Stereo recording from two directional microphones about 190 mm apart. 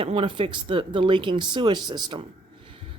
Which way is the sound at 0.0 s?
30° right (ahead or behind).